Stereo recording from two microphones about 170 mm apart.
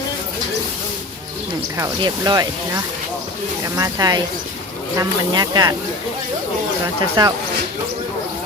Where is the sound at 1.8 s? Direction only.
20° right (ahead or behind).